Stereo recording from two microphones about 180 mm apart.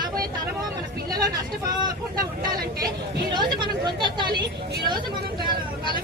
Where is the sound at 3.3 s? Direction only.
25° right (ahead or behind).